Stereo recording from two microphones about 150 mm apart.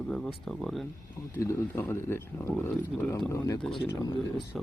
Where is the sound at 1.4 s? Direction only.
20° left (ahead or behind).